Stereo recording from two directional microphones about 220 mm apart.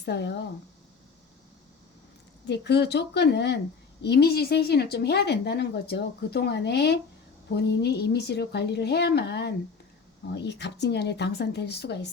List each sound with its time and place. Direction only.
0.0 s a woman's voice: 50° left (ahead or behind)
2.5 s a woman's voice: 50° left (ahead or behind)